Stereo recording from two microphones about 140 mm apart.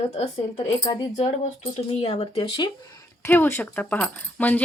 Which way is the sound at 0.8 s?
30° left (ahead or behind).